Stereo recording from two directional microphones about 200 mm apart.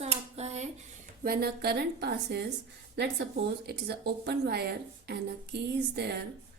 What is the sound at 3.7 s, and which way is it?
A woman's voice, 55° right (ahead or behind).